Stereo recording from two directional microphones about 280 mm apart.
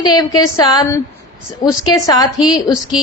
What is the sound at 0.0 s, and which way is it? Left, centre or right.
A woman's voice, centre.